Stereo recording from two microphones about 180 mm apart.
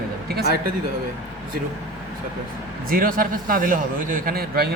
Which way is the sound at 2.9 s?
50° right (ahead or behind).